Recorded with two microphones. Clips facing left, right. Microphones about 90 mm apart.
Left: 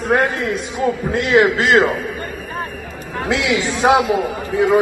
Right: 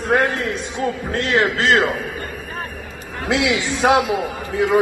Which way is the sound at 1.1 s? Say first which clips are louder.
Left 5 dB; 15° left (ahead or behind).